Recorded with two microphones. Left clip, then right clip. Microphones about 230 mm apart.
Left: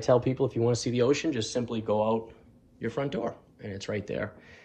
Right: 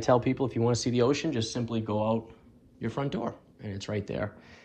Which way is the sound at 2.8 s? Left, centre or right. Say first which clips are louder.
Left 2 dB; centre.